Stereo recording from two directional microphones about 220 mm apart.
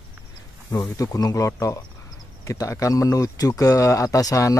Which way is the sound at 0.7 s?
15° left (ahead or behind).